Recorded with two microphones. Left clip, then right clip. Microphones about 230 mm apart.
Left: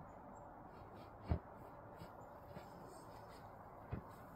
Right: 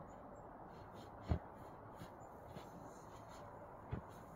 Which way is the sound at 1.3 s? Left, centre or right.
Centre.